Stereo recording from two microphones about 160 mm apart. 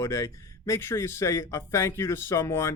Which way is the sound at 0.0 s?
20° left (ahead or behind).